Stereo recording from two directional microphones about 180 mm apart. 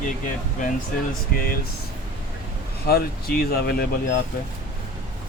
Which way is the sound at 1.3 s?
55° left (ahead or behind).